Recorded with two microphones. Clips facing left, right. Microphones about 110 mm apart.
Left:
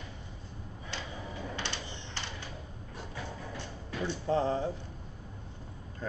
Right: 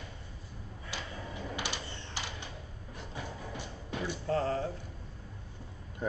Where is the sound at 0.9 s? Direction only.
10° right (ahead or behind).